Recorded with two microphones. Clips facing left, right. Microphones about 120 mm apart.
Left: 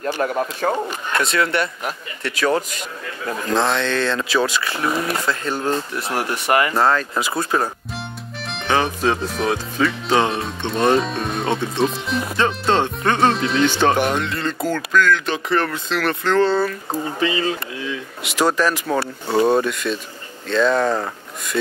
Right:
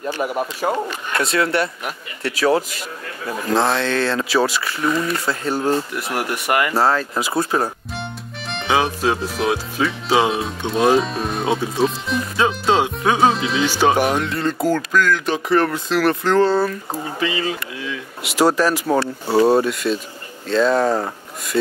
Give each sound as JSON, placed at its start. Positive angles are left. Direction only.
{"t": 0.2, "sound": "speech", "side_deg": -10}
{"t": 5.9, "sound": "speech", "side_deg": 30}
{"t": 6.7, "sound": "speech", "side_deg": -5}
{"t": 17.2, "sound": "speech", "side_deg": 30}
{"t": 18.2, "sound": "speech", "side_deg": -5}